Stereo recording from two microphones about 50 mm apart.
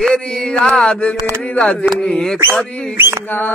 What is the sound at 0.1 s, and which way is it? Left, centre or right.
Mantra, centre.